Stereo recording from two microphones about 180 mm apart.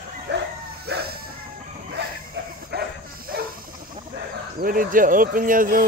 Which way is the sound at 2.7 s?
65° right (ahead or behind).